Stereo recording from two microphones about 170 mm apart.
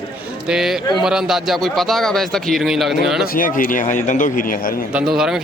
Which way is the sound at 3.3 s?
55° left (ahead or behind).